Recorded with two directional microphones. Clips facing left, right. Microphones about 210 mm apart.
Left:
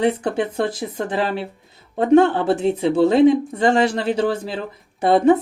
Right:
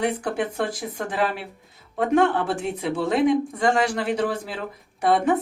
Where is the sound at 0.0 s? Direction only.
25° left (ahead or behind).